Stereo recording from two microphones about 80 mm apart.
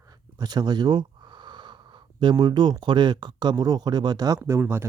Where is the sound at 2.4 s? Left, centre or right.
Right.